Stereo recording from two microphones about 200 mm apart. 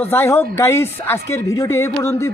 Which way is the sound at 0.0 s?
10° left (ahead or behind).